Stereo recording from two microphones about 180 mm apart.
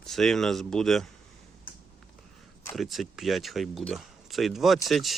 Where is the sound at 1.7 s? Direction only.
55° left (ahead or behind).